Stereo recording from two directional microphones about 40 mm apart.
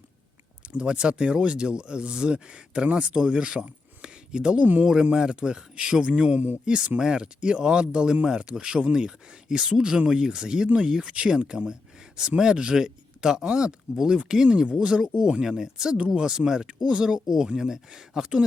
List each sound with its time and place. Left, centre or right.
0.6 s speech: right
4.6 s a man's voice: right
5.1 s speech: right